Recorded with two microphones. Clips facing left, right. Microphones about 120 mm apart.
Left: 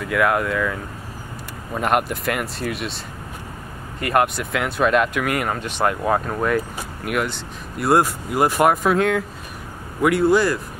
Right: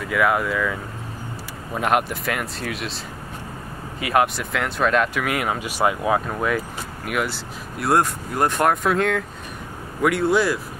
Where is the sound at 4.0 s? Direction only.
Centre (ahead or behind).